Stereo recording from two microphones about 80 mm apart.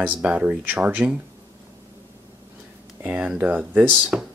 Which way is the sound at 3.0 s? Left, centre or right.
Centre.